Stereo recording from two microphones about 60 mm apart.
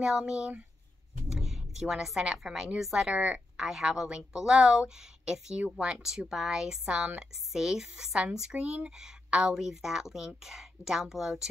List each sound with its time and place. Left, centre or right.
0.0 s speech: centre
1.3 s a sound: centre
2.3 s speech: centre
3.1 s a woman's voice: right
3.5 s speech: centre
9.5 s speech: centre